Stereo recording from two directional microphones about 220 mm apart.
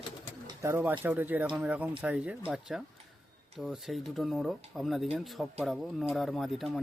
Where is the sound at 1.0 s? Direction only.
10° right (ahead or behind).